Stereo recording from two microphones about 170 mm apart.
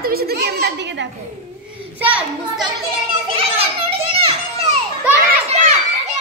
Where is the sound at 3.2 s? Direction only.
35° right (ahead or behind).